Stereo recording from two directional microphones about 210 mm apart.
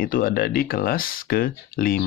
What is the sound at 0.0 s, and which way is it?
Speech, 45° left (ahead or behind).